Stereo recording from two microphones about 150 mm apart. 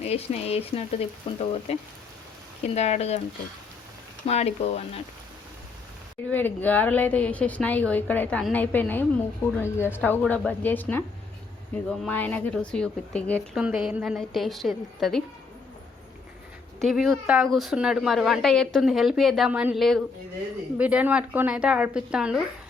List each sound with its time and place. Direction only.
0.0 s speech: 45° left (ahead or behind)
4.3 s speech: 45° left (ahead or behind)
6.3 s a woman's voice: 10° left (ahead or behind)
13.6 s a woman's voice: 5° right (ahead or behind)
16.8 s a woman's voice: centre (ahead or behind)